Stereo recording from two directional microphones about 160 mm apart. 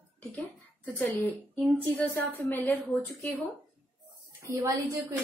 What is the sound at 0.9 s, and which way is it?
A woman's voice, 5° left (ahead or behind).